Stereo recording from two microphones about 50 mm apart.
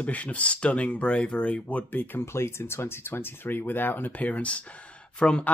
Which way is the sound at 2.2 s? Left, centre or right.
Left.